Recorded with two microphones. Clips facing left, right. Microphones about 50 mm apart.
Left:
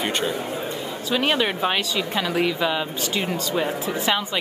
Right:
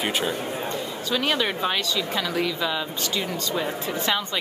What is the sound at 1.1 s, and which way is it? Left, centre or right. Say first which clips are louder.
Speech: left 3 dB; left.